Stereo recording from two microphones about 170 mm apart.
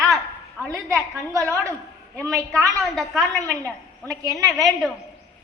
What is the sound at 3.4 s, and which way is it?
A woman's voice, 20° right (ahead or behind).